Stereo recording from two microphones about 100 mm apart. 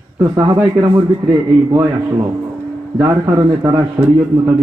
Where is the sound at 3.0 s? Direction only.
30° right (ahead or behind).